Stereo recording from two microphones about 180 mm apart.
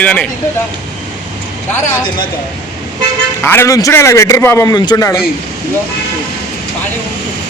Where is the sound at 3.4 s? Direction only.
10° left (ahead or behind).